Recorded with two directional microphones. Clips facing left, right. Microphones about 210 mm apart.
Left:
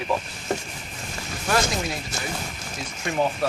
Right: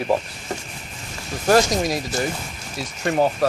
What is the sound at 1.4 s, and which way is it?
Speech, 40° right (ahead or behind).